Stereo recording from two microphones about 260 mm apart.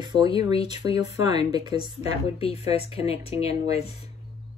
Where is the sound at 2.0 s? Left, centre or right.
Left.